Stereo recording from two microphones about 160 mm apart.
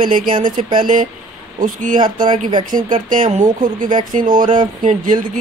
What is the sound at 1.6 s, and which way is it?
Speech, 55° right (ahead or behind).